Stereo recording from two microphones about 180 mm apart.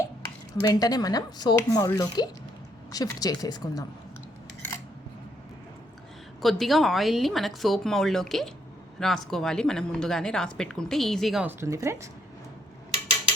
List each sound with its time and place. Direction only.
0.6 s speech: 20° left (ahead or behind)
6.4 s a woman's voice: centre (ahead or behind)
11.4 s speech: 15° right (ahead or behind)